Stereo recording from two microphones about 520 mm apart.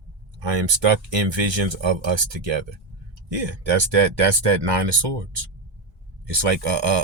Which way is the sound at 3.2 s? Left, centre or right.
Right.